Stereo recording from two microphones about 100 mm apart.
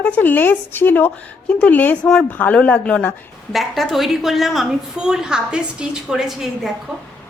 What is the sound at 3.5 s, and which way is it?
A woman's voice, centre (ahead or behind).